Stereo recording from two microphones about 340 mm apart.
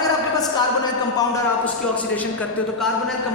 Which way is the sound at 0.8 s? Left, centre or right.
Centre.